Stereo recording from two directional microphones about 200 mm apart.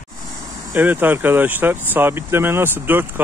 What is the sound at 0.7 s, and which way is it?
Speech, 10° right (ahead or behind).